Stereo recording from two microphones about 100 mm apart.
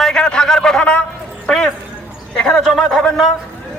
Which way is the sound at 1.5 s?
5° left (ahead or behind).